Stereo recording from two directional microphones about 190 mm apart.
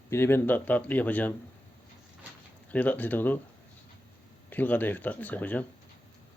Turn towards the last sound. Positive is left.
turn(degrees=10)  # may be behind; listen again after turning